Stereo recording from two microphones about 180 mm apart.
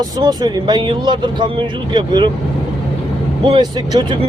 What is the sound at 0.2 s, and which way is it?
Speech, 20° right (ahead or behind).